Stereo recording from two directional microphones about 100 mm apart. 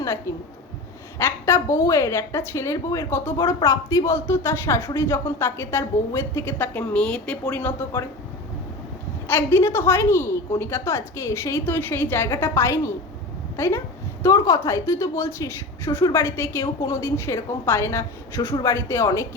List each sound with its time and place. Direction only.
0.0 s a woman's voice: 30° left (ahead or behind); by 7.3 s 10° left (ahead or behind)
9.2 s a woman's voice: 25° left (ahead or behind)
13.6 s a sound: 30° left (ahead or behind)
14.3 s a woman's voice: 35° left (ahead or behind)